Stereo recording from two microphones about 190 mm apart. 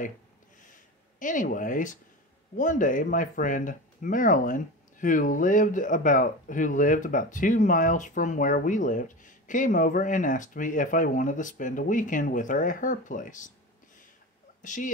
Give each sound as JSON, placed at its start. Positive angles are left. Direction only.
{"t": 1.2, "sound": "speech", "side_deg": 45}
{"t": 14.6, "sound": "speech", "side_deg": 40}